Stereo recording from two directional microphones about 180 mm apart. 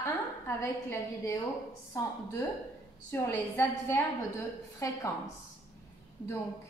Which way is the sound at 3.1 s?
15° left (ahead or behind).